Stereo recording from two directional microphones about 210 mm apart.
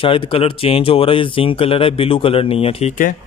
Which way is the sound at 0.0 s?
25° left (ahead or behind).